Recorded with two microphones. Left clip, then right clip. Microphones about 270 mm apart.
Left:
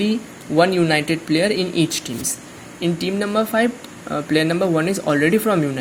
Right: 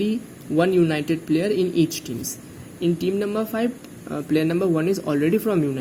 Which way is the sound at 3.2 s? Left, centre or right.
Centre.